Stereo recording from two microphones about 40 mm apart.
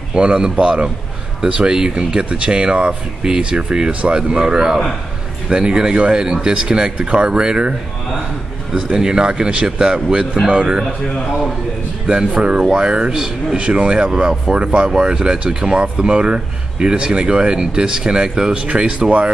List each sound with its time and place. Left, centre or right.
0.1 s speech: right
8.9 s speech: right
12.1 s speech: right